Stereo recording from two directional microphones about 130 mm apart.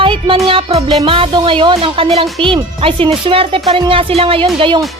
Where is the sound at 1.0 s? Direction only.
45° right (ahead or behind).